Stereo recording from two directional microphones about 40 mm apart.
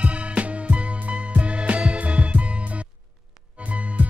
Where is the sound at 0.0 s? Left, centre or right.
Right.